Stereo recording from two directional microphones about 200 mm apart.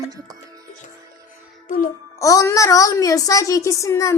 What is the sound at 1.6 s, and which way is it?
Music, 40° left (ahead or behind).